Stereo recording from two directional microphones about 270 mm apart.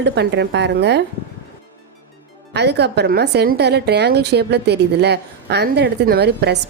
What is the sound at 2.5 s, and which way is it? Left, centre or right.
Speech, right.